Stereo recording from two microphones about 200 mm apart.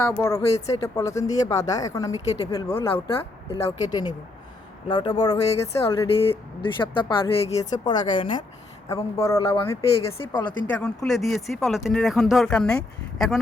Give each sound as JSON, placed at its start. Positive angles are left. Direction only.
{"t": 0.0, "sound": "speech", "side_deg": 15}
{"t": 2.9, "sound": "speech", "side_deg": 25}
{"t": 6.1, "sound": "speech", "side_deg": 30}
{"t": 10.3, "sound": "speech", "side_deg": 5}